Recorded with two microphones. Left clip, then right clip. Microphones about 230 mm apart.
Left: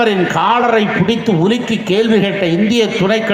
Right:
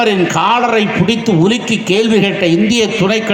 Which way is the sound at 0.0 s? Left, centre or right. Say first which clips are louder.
Right 1 dB; right.